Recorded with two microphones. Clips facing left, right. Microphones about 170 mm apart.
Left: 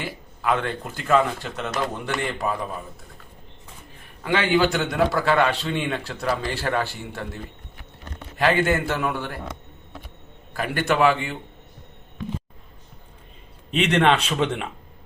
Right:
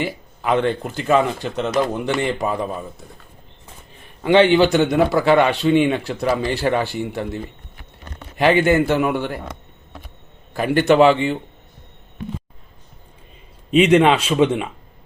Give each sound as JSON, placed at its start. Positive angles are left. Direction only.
{"t": 0.0, "sound": "speech", "side_deg": -20}
{"t": 4.2, "sound": "a man's voice", "side_deg": -20}
{"t": 8.4, "sound": "speech", "side_deg": -20}
{"t": 10.5, "sound": "speech", "side_deg": -25}
{"t": 13.7, "sound": "speech", "side_deg": -5}